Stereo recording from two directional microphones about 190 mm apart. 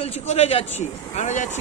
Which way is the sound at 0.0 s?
35° left (ahead or behind).